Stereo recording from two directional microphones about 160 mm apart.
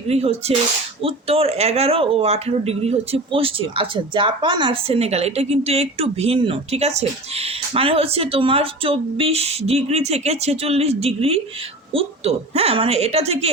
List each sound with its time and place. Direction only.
0.1 s speech: 40° right (ahead or behind)